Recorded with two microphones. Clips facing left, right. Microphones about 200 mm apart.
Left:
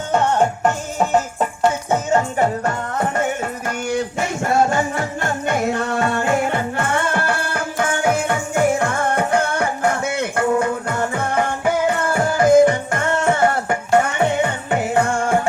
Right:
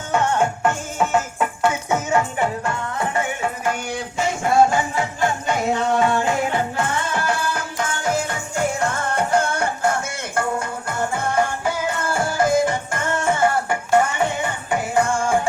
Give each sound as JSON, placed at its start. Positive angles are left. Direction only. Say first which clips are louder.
{"t": 0.1, "sound": "music", "louder": "left 2 dB", "side_deg": 40}